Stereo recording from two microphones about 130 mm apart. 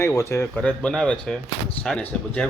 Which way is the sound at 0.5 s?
5° left (ahead or behind).